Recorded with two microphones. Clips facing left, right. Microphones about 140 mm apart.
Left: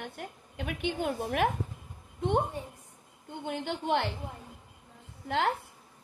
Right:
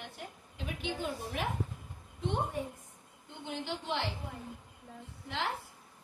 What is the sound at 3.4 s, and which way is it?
Speech, 55° left (ahead or behind).